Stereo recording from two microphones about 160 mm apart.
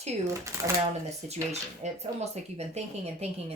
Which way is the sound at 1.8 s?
40° right (ahead or behind).